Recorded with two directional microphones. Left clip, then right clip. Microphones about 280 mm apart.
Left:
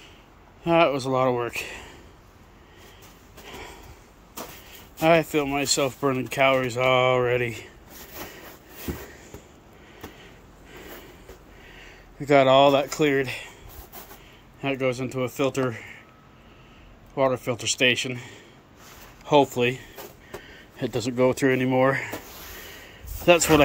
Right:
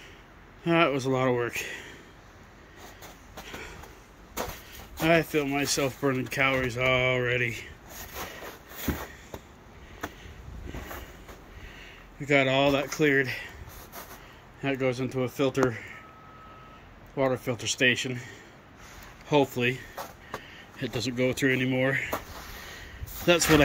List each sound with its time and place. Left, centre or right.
0.7 s speech: centre
5.0 s speech: centre
8.9 s sniff: right
11.8 s speech: centre
14.6 s speech: centre
17.1 s speech: centre
23.2 s speech: centre